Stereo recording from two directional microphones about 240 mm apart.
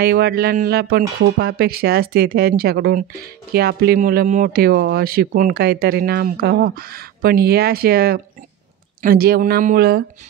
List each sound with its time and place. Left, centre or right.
0.0 s speech: right